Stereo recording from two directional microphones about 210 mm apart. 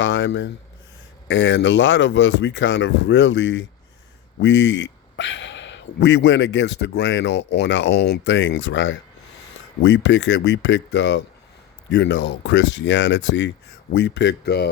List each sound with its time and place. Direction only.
0.0 s speech: 60° left (ahead or behind)